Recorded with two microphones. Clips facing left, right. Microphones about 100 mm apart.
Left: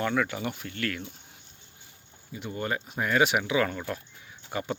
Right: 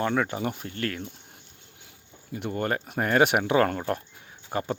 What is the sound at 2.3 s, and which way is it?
Speech, 55° right (ahead or behind).